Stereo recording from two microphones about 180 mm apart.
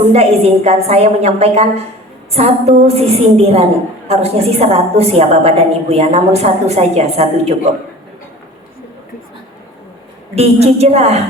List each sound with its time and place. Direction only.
0.1 s a woman's voice: 35° right (ahead or behind)
10.3 s a woman's voice: 35° right (ahead or behind)